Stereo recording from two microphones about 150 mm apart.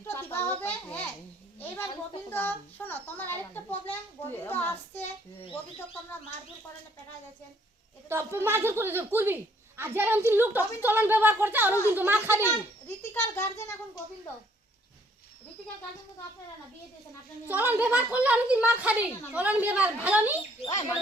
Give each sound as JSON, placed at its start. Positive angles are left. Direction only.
{"t": 0.0, "sound": "a sound", "side_deg": 15}
{"t": 2.3, "sound": "a child's voice", "side_deg": 10}
{"t": 8.1, "sound": "speech", "side_deg": -15}
{"t": 13.1, "sound": "a child's voice", "side_deg": 15}
{"t": 17.5, "sound": "speech", "side_deg": -10}